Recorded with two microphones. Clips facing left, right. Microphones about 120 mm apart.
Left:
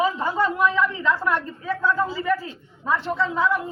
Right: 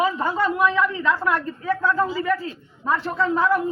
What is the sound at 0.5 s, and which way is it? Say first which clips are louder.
A woman's voice: right 1 dB; 15° right (ahead or behind).